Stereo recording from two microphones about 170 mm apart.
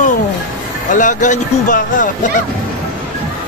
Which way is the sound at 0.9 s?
50° left (ahead or behind).